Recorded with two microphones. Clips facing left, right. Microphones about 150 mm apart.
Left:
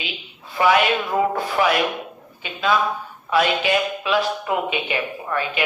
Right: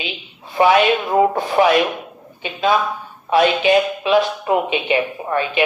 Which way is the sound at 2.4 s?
25° right (ahead or behind).